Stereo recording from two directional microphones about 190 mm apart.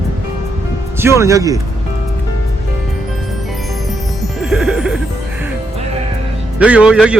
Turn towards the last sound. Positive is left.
turn(degrees=-5)  # may be behind; listen again after turning